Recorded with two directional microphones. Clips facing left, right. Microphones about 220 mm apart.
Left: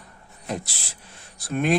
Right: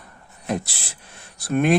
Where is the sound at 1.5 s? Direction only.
60° right (ahead or behind).